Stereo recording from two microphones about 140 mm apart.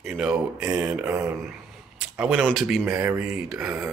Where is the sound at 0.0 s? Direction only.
Centre (ahead or behind).